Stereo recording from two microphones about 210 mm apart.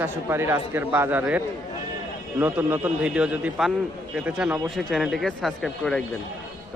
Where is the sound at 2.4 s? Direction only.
10° right (ahead or behind).